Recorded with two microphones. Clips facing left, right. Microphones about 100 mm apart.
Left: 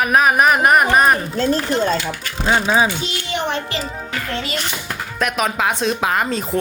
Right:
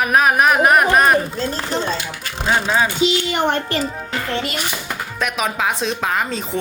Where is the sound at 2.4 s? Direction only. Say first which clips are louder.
Left 2 dB; 5° left (ahead or behind).